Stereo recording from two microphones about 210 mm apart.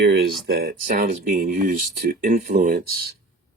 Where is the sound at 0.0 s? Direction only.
55° right (ahead or behind).